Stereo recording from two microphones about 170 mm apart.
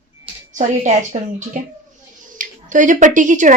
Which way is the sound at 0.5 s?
45° right (ahead or behind).